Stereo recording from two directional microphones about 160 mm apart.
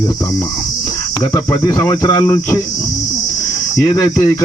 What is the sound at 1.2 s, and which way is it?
Speech, 20° left (ahead or behind).